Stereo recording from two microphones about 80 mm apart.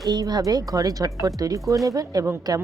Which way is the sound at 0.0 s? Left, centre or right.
Right.